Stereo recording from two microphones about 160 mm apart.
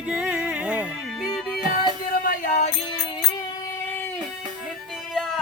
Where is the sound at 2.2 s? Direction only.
55° left (ahead or behind).